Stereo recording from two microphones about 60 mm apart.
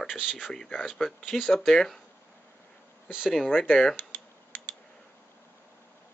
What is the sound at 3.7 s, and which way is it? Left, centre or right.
Speech, centre.